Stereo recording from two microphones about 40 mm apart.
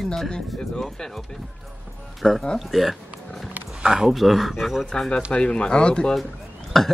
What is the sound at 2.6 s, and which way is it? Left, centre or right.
Speech, centre.